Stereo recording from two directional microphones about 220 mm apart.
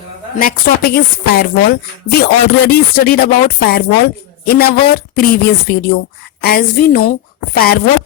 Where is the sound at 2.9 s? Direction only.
45° left (ahead or behind).